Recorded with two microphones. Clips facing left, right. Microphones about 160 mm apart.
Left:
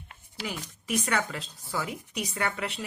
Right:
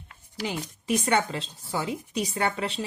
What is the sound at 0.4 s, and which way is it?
Speech, 25° right (ahead or behind).